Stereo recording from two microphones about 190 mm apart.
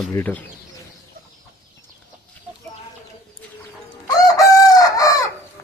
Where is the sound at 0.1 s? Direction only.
10° left (ahead or behind).